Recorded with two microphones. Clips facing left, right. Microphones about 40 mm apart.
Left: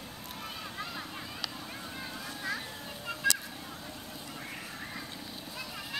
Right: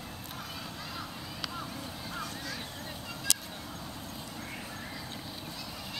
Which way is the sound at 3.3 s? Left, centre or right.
Left.